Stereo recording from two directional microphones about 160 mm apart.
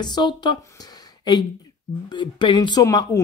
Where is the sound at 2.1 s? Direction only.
30° left (ahead or behind).